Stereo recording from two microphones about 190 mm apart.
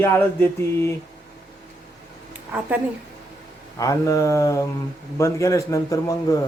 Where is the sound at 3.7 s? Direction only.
15° left (ahead or behind).